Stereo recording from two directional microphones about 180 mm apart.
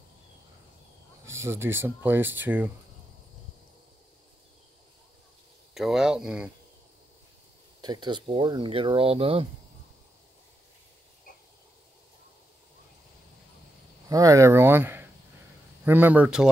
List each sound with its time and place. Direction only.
1.4 s speech: 15° right (ahead or behind)
5.8 s speech: 5° right (ahead or behind)
7.8 s speech: 25° right (ahead or behind)
14.0 s speech: 20° right (ahead or behind)